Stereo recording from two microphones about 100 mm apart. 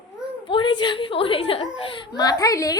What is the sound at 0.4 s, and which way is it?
A child's voice, 55° left (ahead or behind).